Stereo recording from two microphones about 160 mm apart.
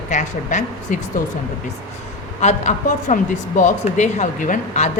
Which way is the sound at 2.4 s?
50° left (ahead or behind).